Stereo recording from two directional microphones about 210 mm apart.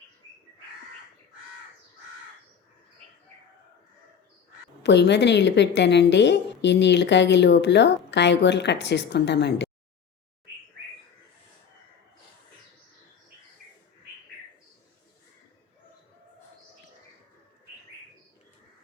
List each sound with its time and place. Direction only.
4.8 s a woman's voice: 55° left (ahead or behind)